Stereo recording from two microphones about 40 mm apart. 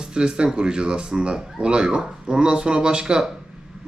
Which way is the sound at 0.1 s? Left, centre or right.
Right.